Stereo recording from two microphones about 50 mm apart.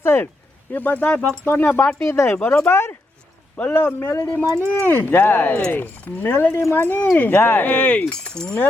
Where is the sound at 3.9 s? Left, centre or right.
Left.